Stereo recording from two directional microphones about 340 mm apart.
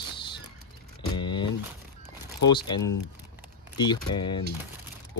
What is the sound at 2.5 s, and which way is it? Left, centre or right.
Mechanisms, centre.